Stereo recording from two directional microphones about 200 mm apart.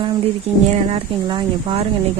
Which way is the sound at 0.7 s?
30° right (ahead or behind).